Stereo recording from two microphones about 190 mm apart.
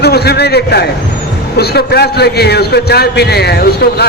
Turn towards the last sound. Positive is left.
turn(degrees=55)  # may be behind; listen again after turning